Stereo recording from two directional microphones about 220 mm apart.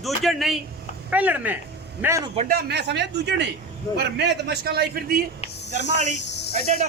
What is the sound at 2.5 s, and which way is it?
Speech, 50° right (ahead or behind).